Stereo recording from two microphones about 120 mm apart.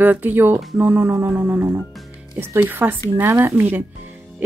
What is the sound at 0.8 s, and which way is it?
Music, 15° right (ahead or behind).